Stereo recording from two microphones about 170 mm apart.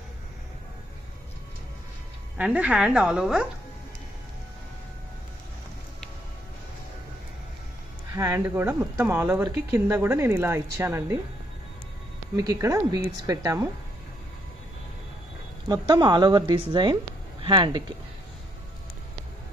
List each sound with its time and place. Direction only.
2.3 s speech: 10° right (ahead or behind)
8.1 s speech: 15° right (ahead or behind)
12.4 s speech: 20° right (ahead or behind)
15.7 s a woman's voice: 25° right (ahead or behind)